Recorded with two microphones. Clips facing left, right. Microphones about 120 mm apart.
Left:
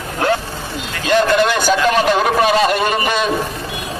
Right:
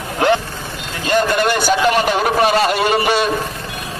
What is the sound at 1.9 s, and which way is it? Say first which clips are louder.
Speech: left 1 dB; 5° right (ahead or behind).